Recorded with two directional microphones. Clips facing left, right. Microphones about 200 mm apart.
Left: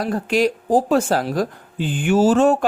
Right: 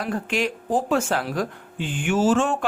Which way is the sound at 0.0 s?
35° left (ahead or behind).